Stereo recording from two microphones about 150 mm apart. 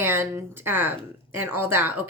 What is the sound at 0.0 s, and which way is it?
A woman's voice, 15° right (ahead or behind).